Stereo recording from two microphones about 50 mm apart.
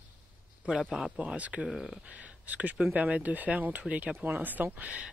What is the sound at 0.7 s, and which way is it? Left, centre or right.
Speech, centre.